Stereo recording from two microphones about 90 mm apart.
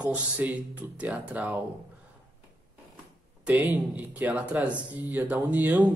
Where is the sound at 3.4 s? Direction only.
20° right (ahead or behind).